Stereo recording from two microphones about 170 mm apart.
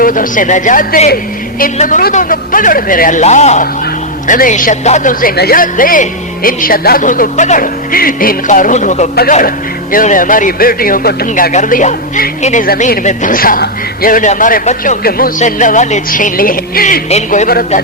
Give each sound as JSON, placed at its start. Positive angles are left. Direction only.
{"t": 0.0, "sound": "a woman's voice", "side_deg": 55}
{"t": 5.4, "sound": "speech", "side_deg": 60}
{"t": 11.5, "sound": "a woman's voice", "side_deg": 50}
{"t": 12.6, "sound": "a woman's voice", "side_deg": 60}
{"t": 17.1, "sound": "a woman's voice", "side_deg": 45}